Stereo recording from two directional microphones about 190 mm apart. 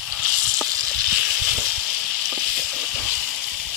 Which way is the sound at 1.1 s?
5° right (ahead or behind).